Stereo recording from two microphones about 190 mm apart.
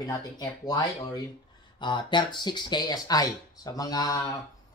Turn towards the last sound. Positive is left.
turn(degrees=20)  # may be behind; listen again after turning